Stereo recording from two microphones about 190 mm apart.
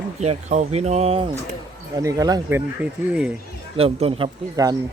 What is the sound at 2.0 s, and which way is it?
Speech, 20° right (ahead or behind).